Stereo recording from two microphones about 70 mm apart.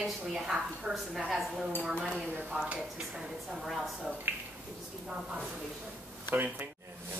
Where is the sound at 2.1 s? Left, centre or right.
Centre.